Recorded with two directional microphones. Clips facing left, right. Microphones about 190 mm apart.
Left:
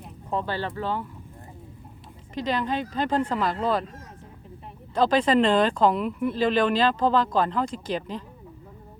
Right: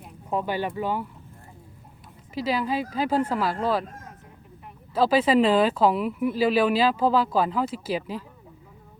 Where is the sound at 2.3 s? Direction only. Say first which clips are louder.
Right 1 dB; 5° right (ahead or behind).